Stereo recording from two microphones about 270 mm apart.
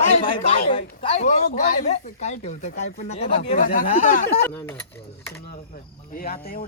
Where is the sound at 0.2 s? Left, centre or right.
Left.